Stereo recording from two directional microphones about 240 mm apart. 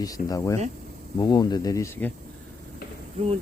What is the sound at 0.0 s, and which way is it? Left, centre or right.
Speech, centre.